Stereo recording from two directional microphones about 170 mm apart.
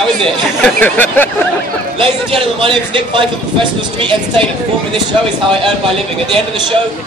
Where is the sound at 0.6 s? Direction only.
10° left (ahead or behind).